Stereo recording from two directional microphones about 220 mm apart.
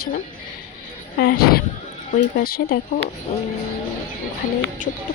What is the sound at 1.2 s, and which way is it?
Speech, 45° left (ahead or behind).